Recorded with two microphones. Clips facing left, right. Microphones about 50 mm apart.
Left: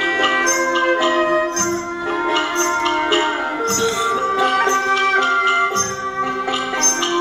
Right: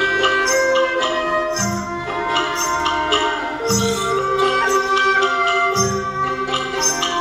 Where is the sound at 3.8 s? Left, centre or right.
Left.